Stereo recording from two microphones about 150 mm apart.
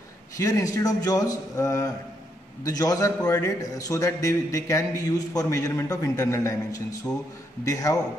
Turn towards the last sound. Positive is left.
turn(degrees=25)  # may be behind; listen again after turning